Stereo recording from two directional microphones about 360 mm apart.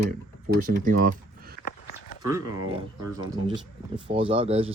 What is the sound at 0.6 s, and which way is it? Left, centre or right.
Speech, right.